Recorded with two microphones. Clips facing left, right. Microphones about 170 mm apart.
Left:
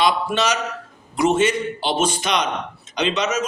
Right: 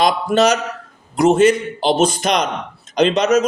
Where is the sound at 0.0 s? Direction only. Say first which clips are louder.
Right 5 dB; 40° right (ahead or behind).